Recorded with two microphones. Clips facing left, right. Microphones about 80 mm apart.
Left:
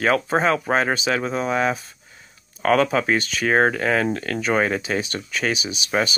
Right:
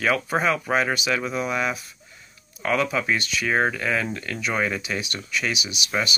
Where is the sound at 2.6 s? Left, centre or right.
Left.